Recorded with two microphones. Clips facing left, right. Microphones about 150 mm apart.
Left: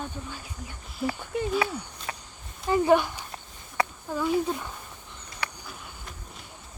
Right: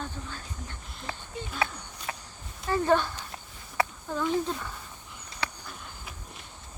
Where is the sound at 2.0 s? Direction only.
10° right (ahead or behind).